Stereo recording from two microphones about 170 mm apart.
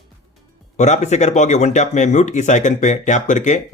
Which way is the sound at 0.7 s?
45° left (ahead or behind).